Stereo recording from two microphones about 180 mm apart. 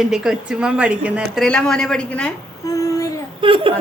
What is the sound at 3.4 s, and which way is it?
Speech, 30° right (ahead or behind).